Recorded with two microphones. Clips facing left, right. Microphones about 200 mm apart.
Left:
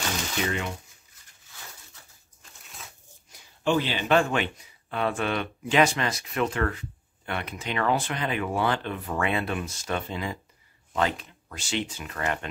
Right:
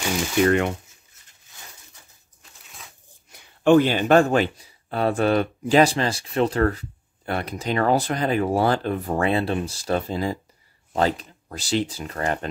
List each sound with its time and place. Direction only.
0.4 s speech: 60° right (ahead or behind)
2.6 s a sound: centre (ahead or behind)
3.3 s speech: 60° right (ahead or behind); by 12.4 s 35° right (ahead or behind)